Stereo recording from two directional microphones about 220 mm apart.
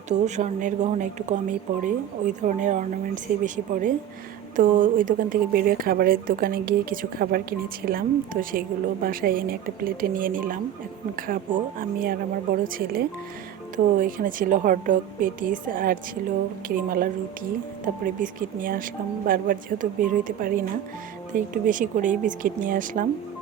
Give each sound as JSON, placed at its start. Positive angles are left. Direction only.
{"t": 0.1, "sound": "speech", "side_deg": -30}